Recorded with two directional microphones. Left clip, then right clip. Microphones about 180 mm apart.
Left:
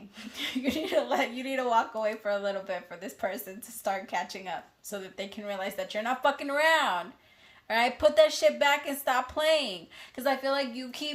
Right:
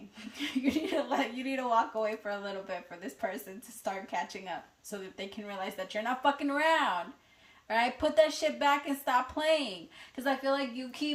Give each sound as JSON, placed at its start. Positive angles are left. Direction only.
{"t": 0.3, "sound": "speech", "side_deg": 40}